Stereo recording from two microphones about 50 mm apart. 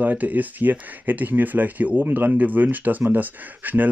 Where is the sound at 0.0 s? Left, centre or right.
Right.